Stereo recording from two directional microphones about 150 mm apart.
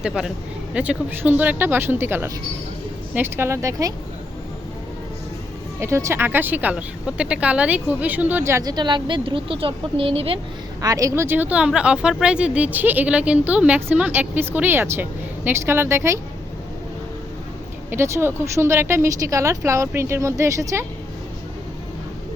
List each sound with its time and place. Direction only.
0.0 s speech: 5° right (ahead or behind); by 3.9 s 20° right (ahead or behind)
5.8 s speech: 20° right (ahead or behind); by 10.4 s 40° right (ahead or behind)
10.8 s speech: 25° right (ahead or behind)
17.9 s speech: 15° right (ahead or behind)